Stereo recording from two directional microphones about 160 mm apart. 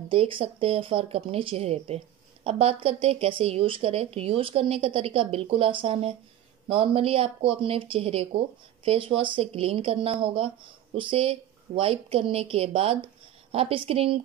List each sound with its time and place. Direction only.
0.1 s a woman's voice: 35° right (ahead or behind)